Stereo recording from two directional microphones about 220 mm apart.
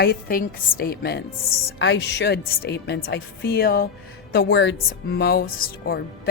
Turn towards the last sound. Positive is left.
turn(degrees=45)  # may be behind; listen again after turning